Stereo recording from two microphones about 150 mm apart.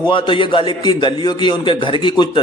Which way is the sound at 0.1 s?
35° left (ahead or behind).